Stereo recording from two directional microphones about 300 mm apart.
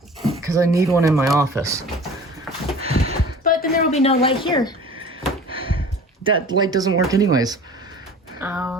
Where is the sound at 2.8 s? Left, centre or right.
Centre.